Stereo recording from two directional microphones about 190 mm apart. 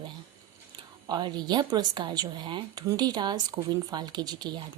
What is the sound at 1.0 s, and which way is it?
A woman's voice, 20° right (ahead or behind).